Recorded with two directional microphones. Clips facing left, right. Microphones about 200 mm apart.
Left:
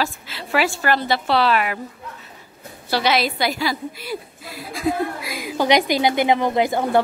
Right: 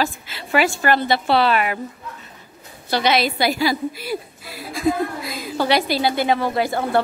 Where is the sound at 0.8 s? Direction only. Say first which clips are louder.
Right 2 dB; centre (ahead or behind).